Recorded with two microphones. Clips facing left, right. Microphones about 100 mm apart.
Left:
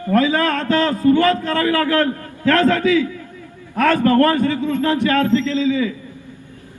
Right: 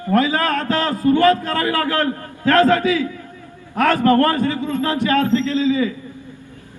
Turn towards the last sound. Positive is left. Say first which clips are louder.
# even
turn(degrees=-35)  # may be behind; listen again after turning